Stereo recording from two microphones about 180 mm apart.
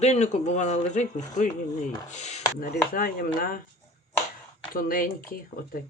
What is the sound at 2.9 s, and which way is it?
Speech, 50° left (ahead or behind).